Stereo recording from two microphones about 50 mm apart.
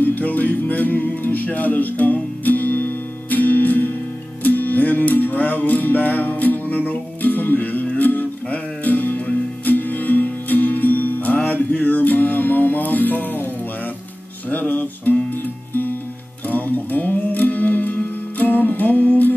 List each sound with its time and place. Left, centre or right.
0.0 s music: left
14.5 s music: left
16.4 s music: left